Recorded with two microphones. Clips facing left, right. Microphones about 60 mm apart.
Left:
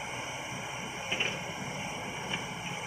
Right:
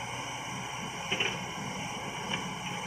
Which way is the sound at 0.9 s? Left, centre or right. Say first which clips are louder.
Right 1 dB; centre.